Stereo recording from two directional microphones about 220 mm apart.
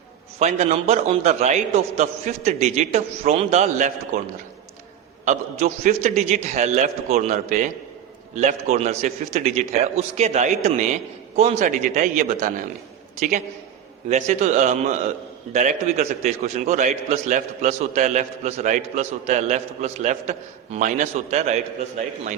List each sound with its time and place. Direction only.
0.3 s a man's voice: 30° right (ahead or behind)
5.2 s a man's voice: 30° right (ahead or behind)